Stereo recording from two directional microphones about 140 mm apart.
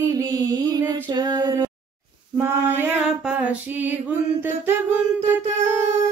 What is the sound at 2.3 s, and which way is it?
Mantra, 15° right (ahead or behind).